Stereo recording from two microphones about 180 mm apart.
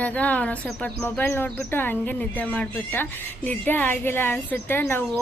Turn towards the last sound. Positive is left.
turn(degrees=10)  # may be behind; listen again after turning